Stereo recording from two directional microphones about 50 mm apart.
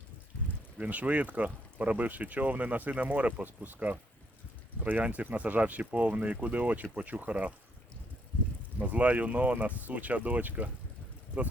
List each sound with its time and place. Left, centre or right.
0.8 s speech: right
4.8 s speech: right
8.8 s speech: right